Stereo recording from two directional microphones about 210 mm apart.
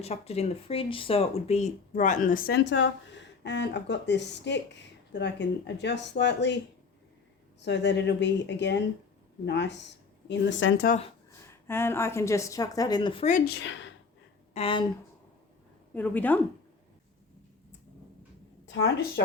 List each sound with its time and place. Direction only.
0.0 s speech: 30° left (ahead or behind); by 6.6 s 55° left (ahead or behind)
7.6 s speech: 55° left (ahead or behind)
11.7 s speech: 10° left (ahead or behind)
13.2 s speech: 45° left (ahead or behind); by 13.9 s 60° left (ahead or behind)
14.5 s speech: 25° left (ahead or behind)
16.0 s speech: 10° left (ahead or behind)
18.6 s a woman's voice: 60° left (ahead or behind)